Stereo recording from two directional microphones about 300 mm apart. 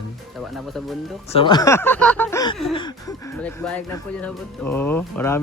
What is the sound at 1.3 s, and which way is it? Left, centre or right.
Speech, centre.